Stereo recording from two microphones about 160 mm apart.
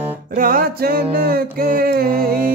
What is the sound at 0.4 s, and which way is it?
Music, 65° right (ahead or behind).